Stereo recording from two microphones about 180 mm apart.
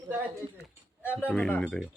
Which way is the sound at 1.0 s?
10° left (ahead or behind).